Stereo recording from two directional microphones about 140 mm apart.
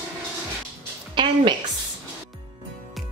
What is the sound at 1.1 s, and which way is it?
Speech, 35° right (ahead or behind).